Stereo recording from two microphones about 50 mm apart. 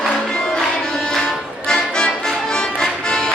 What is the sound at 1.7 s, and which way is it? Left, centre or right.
Music, centre.